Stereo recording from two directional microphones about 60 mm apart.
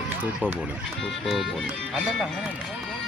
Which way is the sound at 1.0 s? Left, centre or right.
Centre.